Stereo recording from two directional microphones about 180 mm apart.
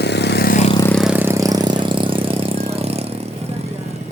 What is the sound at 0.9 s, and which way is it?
Vehicle, 5° right (ahead or behind).